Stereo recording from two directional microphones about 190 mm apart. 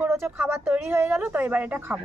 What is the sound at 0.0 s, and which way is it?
Speech, 10° right (ahead or behind).